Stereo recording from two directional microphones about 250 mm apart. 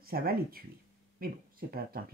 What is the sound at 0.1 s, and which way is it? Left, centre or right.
A woman's voice, right.